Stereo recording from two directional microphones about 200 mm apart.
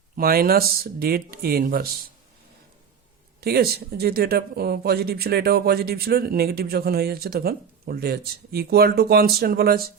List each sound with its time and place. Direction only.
0.2 s speech: 50° right (ahead or behind)
3.4 s speech: 50° right (ahead or behind)